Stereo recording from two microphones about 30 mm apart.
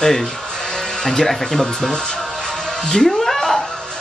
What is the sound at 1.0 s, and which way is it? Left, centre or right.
Speech, centre.